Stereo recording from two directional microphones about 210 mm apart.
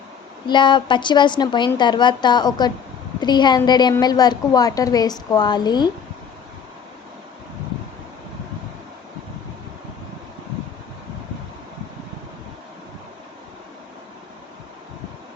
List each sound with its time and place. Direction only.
0.4 s a woman's voice: 20° left (ahead or behind)